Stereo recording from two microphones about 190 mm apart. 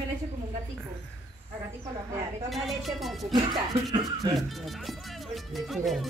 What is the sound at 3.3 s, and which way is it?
Speech, 20° right (ahead or behind).